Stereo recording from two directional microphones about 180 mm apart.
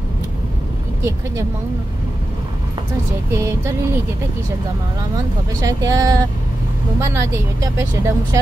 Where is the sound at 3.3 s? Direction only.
15° right (ahead or behind).